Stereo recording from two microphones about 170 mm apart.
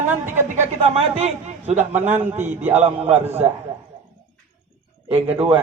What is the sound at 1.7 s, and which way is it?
Speech, 10° right (ahead or behind).